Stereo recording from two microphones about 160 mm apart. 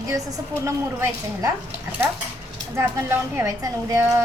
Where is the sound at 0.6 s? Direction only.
15° right (ahead or behind).